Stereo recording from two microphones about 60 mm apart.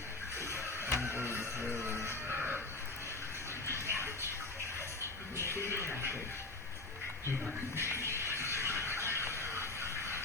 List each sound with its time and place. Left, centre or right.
0.3 s music: right
2.0 s a sound: right
3.7 s music: left
3.9 s bathtub: right
5.4 s television: left
7.8 s music: right
8.2 s a sound: right